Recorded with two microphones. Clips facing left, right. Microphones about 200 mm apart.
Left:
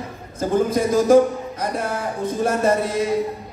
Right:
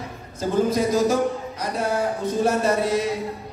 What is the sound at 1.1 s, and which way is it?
Speech, 55° left (ahead or behind).